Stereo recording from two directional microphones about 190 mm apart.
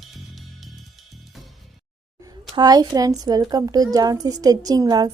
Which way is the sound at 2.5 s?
20° right (ahead or behind).